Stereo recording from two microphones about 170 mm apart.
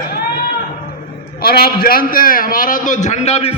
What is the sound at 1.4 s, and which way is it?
A man's voice, 60° left (ahead or behind).